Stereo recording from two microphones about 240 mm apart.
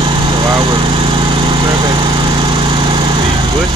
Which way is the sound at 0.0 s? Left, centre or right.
Centre.